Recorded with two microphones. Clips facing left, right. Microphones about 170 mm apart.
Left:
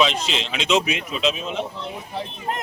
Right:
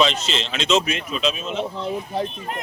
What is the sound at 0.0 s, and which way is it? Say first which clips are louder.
Speech: right 1 dB; 10° left (ahead or behind).